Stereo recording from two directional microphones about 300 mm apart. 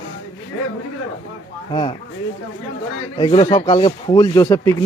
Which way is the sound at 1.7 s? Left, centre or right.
Centre.